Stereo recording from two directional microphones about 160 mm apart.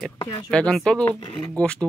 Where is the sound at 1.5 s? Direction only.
5° left (ahead or behind).